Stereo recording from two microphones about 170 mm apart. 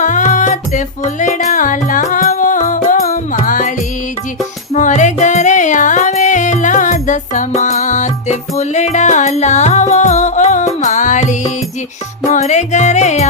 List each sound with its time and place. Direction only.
0.0 s music: 45° left (ahead or behind)
4.7 s music: 45° left (ahead or behind)